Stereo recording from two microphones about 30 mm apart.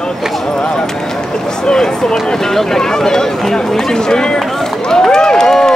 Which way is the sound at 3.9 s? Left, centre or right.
Left.